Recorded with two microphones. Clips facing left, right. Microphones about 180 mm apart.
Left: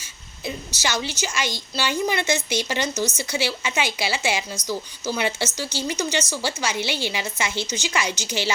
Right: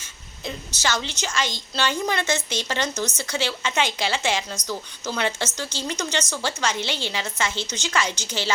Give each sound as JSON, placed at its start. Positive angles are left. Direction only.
{"t": 0.0, "sound": "a woman's voice", "side_deg": 10}